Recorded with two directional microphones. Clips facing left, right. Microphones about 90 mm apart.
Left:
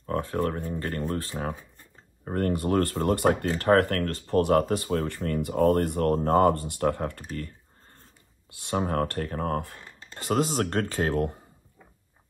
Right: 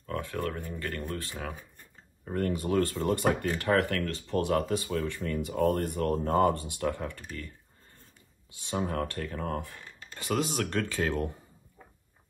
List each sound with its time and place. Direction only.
0.2 s speech: 30° left (ahead or behind)
1.5 s a sound: 20° left (ahead or behind)
2.2 s speech: 50° left (ahead or behind)